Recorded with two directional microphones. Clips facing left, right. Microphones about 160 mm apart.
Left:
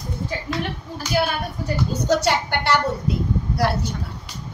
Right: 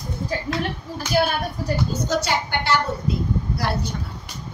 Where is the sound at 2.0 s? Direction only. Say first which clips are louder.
Left 7 dB; 65° left (ahead or behind).